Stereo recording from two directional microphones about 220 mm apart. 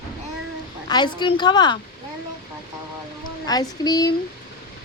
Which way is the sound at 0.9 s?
20° left (ahead or behind).